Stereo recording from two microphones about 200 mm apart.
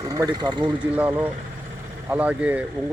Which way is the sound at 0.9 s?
10° right (ahead or behind).